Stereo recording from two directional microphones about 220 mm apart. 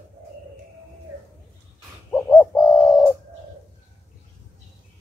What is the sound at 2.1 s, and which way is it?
Bird, 10° left (ahead or behind).